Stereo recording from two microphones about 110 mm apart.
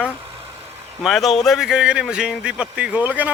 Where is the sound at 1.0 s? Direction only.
Centre (ahead or behind).